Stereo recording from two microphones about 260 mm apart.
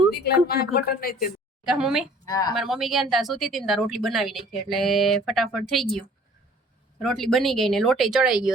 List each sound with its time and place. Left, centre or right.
0.2 s a woman's voice: left
1.6 s speech: centre
2.2 s speech: centre
2.6 s speech: centre
7.0 s speech: centre